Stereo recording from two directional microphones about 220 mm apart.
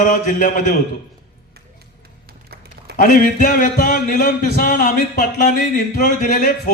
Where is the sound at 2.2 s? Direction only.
45° right (ahead or behind).